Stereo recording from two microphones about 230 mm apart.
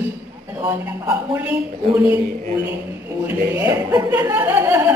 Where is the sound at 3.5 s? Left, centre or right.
Centre.